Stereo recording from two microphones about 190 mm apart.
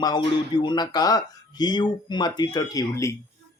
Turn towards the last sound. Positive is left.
turn(degrees=15)  # may be behind; listen again after turning